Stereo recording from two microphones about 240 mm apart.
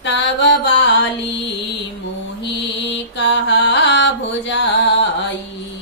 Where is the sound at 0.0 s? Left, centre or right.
Left.